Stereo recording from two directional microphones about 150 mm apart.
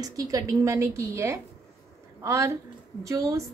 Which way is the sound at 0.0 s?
25° right (ahead or behind).